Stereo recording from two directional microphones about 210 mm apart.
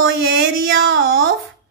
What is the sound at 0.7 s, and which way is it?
Speech, 70° right (ahead or behind).